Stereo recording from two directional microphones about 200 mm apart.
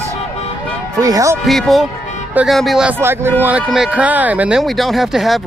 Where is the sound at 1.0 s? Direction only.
15° right (ahead or behind).